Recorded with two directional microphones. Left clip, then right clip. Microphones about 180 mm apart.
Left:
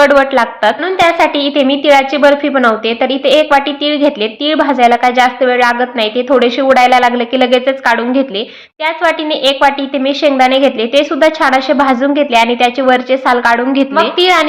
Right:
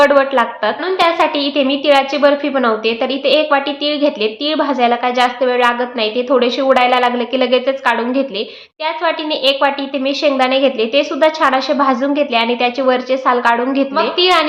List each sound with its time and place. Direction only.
0.0 s a woman's voice: 20° left (ahead or behind)